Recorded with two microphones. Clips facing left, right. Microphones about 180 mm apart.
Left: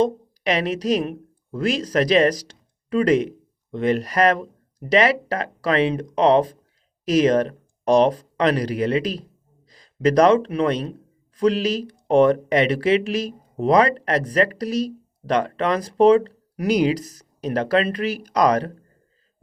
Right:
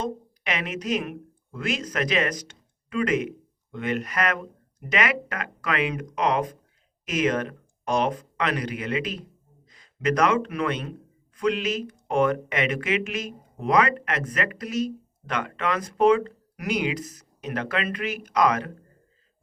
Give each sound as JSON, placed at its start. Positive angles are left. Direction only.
{"t": 0.0, "sound": "a woman's voice", "side_deg": 35}